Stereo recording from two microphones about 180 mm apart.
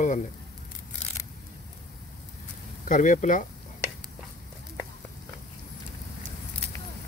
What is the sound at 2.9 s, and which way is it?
Speech, 45° left (ahead or behind).